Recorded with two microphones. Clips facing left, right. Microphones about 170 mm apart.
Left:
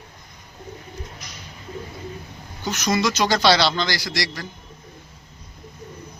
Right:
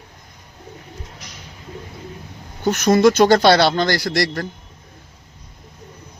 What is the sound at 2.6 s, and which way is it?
A man's voice, 55° right (ahead or behind).